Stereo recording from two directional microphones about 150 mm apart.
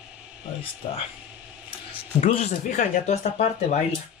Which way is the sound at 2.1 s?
50° left (ahead or behind).